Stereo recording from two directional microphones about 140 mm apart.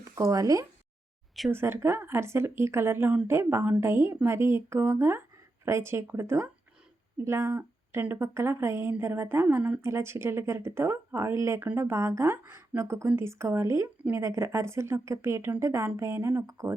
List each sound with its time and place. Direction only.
0.0 s a woman's voice: 25° right (ahead or behind)